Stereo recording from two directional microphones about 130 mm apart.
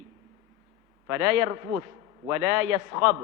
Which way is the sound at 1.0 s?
20° right (ahead or behind).